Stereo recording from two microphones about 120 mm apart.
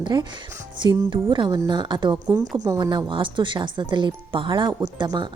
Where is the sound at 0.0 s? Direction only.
40° right (ahead or behind).